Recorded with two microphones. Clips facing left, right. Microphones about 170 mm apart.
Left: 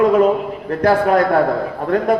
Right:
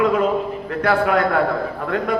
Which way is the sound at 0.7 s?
40° left (ahead or behind).